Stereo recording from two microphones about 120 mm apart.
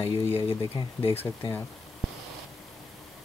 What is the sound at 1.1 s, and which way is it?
Speech, 20° left (ahead or behind).